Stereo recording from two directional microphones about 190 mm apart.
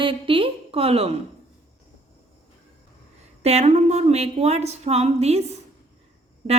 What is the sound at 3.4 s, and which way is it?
A woman's voice, 35° right (ahead or behind).